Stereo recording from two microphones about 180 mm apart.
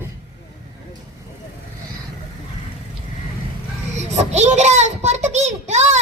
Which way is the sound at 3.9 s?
40° right (ahead or behind).